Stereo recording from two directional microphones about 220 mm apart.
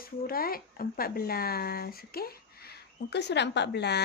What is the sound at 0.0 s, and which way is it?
Speech, 40° left (ahead or behind).